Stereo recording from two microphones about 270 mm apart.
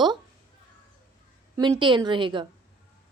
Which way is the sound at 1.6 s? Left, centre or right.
Centre.